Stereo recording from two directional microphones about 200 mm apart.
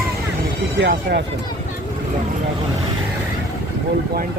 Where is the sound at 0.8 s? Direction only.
55° right (ahead or behind).